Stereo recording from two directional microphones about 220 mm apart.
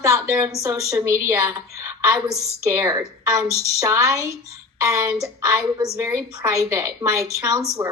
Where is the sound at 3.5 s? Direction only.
30° left (ahead or behind).